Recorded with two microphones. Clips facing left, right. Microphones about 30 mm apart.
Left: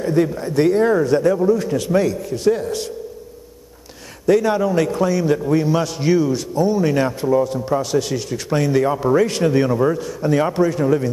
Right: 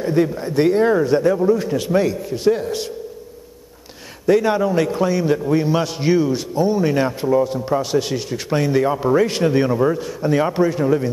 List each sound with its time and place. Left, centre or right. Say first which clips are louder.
0.0 s a sound: even; centre
0.4 s a man's voice: even; centre
4.4 s a man's voice: even; centre